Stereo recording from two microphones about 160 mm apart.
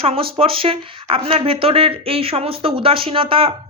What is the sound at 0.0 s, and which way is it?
Speech, 35° right (ahead or behind).